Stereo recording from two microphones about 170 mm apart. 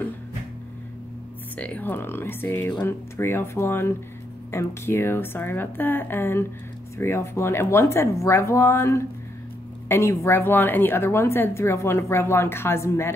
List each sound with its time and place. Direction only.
1.6 s a woman's voice: 10° left (ahead or behind)